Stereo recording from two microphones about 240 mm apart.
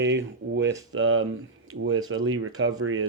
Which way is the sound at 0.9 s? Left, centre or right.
Right.